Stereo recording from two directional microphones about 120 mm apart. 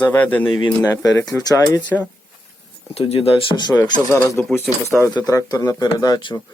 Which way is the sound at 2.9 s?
50° left (ahead or behind).